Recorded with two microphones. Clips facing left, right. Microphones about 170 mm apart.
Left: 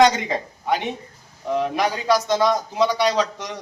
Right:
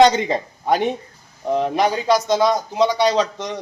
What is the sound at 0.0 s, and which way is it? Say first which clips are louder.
A man's voice: right 3 dB; 30° right (ahead or behind).